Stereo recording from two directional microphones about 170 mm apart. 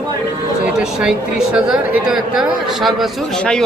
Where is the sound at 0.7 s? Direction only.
5° right (ahead or behind).